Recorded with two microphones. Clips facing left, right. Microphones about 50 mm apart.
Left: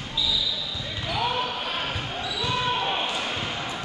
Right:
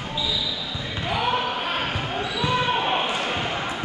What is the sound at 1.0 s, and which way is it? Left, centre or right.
Basketball bounce, right.